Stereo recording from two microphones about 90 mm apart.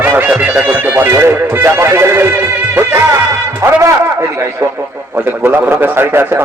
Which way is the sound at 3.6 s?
35° right (ahead or behind).